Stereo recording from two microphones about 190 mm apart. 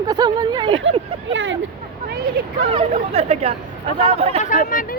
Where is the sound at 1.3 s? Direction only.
80° right.